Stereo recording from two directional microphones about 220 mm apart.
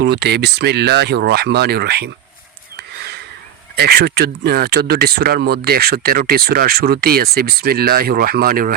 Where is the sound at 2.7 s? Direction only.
45° right (ahead or behind).